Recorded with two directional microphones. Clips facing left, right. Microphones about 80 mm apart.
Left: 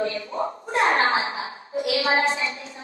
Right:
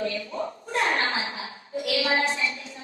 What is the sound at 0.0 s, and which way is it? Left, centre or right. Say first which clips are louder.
A woman's voice: left 3 dB; left.